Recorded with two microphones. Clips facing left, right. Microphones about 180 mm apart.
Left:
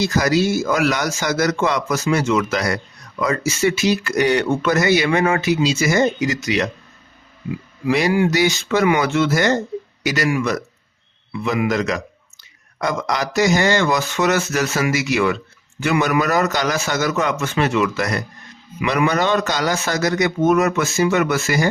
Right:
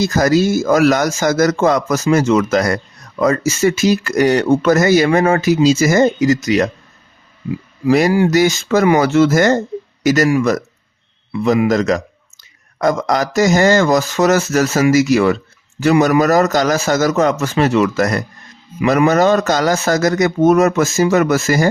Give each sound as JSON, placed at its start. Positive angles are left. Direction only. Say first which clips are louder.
{"t": 0.0, "sound": "speech", "louder": "right 4 dB", "side_deg": -45}
{"t": 7.9, "sound": "a man's voice", "louder": "right 5 dB", "side_deg": -40}